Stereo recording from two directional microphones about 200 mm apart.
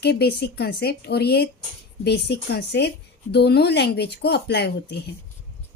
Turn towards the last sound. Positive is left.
turn(degrees=55)  # may be behind; listen again after turning